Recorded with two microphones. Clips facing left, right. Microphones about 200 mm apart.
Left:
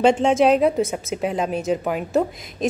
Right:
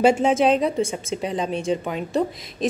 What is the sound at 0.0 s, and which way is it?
A woman's voice, 5° right (ahead or behind).